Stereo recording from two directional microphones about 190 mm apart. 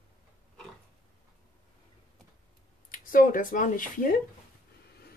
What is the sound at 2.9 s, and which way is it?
Speech, 45° left (ahead or behind).